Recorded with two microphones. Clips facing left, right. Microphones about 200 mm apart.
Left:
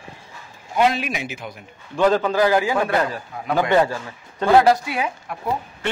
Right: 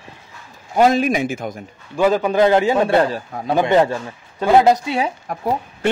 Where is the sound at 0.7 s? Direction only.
40° right (ahead or behind).